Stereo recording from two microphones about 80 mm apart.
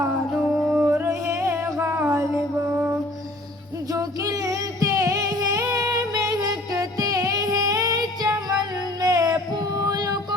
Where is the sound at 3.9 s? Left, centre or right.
Right.